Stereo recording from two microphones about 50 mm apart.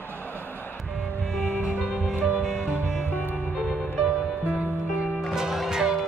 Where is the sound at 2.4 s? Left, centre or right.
Centre.